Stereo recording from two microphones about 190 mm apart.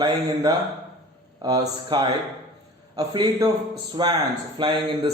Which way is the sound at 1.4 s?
20° right (ahead or behind).